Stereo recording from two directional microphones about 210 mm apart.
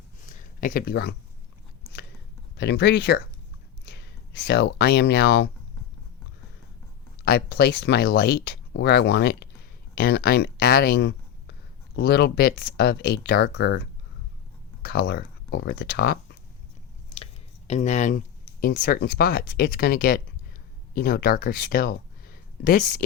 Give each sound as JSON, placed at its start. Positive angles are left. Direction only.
{"t": 0.3, "sound": "a sound", "side_deg": 40}
{"t": 2.6, "sound": "speech", "side_deg": 55}
{"t": 7.3, "sound": "speech", "side_deg": 50}
{"t": 17.7, "sound": "speech", "side_deg": 35}
{"t": 18.6, "sound": "speech", "side_deg": 45}